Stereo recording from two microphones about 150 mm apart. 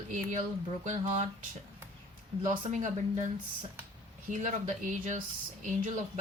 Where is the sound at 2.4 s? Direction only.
55° right (ahead or behind).